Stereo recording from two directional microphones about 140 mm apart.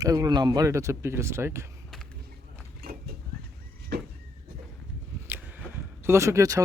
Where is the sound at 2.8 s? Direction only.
90° right.